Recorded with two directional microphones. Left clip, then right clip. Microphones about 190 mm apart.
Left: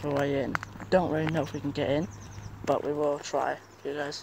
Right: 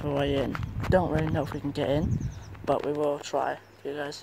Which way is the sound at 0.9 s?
10° right (ahead or behind).